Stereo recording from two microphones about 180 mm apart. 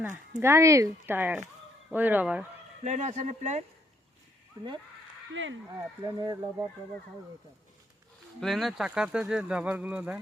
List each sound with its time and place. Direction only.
0.3 s speech: 15° right (ahead or behind)
2.8 s speech: 40° right (ahead or behind)
5.3 s speech: 90° right
5.7 s speech: 20° right (ahead or behind)
8.4 s speech: centre (ahead or behind)